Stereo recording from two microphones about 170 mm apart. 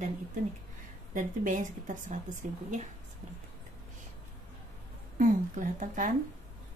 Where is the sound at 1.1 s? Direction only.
50° right (ahead or behind).